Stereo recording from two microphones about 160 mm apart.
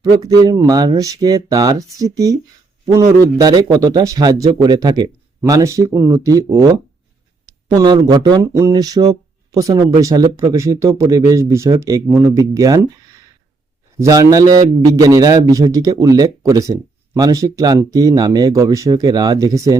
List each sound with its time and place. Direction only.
0.3 s speech: 25° right (ahead or behind)
3.3 s speech: 25° right (ahead or behind)
7.8 s speech: 25° right (ahead or behind)